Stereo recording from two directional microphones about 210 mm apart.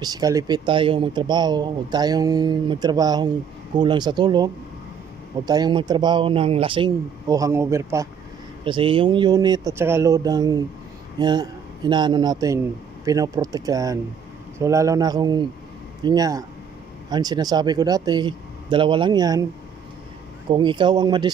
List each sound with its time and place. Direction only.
0.0 s a man's voice: 20° right (ahead or behind)
20.4 s speech: 20° right (ahead or behind)